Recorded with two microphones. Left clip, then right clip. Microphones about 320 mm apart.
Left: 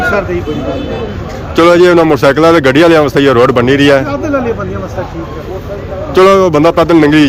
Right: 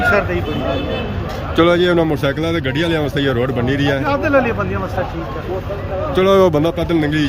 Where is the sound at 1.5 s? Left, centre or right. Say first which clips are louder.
Left 8 dB; centre.